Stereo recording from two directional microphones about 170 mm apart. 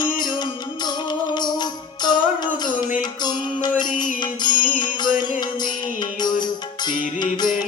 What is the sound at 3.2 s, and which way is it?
Mantra, 25° left (ahead or behind).